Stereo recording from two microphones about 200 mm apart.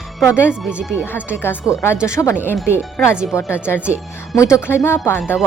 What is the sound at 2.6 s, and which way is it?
A woman's voice, centre (ahead or behind).